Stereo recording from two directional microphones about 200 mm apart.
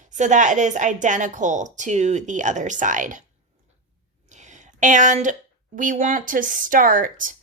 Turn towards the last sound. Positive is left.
turn(degrees=-40)  # may be behind; listen again after turning